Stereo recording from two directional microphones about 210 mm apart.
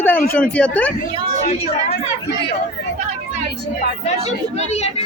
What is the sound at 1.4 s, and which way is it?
Speech, 30° left (ahead or behind).